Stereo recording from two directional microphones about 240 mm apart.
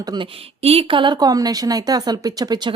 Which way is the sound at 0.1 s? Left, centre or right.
Right.